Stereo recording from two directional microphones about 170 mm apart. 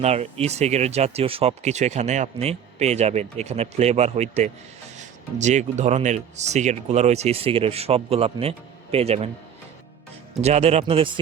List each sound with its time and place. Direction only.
0.0 s speech: 40° right (ahead or behind)
10.4 s speech: 40° right (ahead or behind)